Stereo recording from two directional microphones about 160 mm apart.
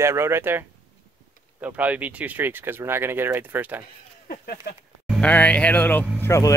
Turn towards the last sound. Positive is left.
turn(degrees=15)  # may be behind; listen again after turning